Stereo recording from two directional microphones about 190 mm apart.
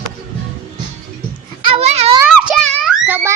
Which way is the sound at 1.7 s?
30° right (ahead or behind).